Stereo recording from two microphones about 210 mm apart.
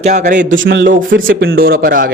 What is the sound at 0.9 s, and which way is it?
A man's voice, 45° right (ahead or behind).